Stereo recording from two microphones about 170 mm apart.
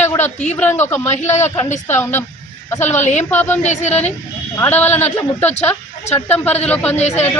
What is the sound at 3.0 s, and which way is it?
Speech, 45° left (ahead or behind).